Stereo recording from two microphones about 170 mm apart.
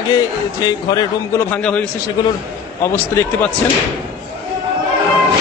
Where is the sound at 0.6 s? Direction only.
20° left (ahead or behind).